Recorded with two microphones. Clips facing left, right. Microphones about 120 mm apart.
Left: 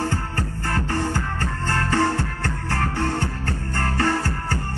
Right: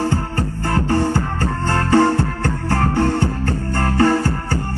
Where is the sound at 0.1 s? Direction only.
25° right (ahead or behind).